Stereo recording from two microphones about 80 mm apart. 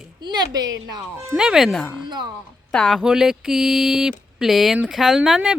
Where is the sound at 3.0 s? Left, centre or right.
Centre.